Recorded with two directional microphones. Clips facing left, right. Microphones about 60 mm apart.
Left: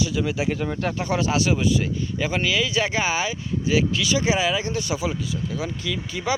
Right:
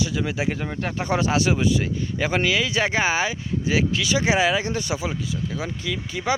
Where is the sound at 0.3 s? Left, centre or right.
Right.